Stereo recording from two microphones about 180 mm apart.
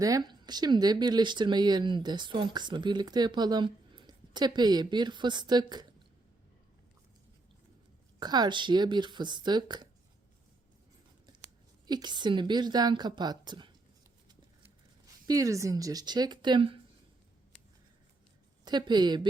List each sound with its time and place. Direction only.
0.0 s speech: 20° right (ahead or behind)
8.2 s speech: 25° right (ahead or behind)
11.9 s speech: 25° right (ahead or behind)
15.3 s speech: 20° right (ahead or behind)
18.6 s speech: 25° right (ahead or behind)